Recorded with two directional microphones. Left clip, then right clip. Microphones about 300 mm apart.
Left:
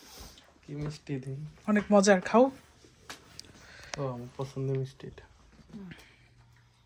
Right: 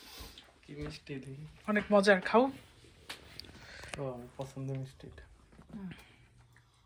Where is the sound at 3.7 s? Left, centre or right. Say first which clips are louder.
Left 4 dB; centre.